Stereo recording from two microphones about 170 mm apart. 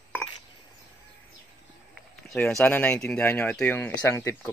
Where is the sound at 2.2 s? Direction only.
5° left (ahead or behind).